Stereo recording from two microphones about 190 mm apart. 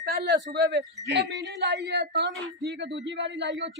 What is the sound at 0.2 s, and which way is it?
A man's voice, 60° right (ahead or behind).